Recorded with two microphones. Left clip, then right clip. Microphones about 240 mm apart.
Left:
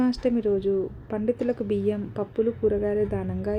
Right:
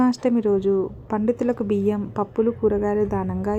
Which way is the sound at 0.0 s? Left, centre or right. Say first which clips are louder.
Right 4 dB; centre.